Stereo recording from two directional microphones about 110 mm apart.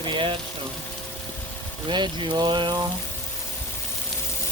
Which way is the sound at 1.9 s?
45° right (ahead or behind).